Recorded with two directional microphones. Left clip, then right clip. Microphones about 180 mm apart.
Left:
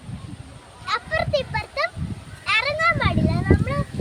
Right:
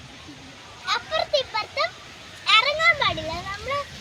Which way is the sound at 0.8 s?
10° left (ahead or behind).